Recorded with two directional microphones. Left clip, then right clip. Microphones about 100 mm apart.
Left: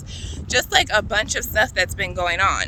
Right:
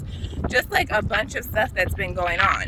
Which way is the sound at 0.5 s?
35° left (ahead or behind).